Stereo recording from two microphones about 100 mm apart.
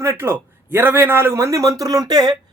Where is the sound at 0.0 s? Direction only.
25° right (ahead or behind).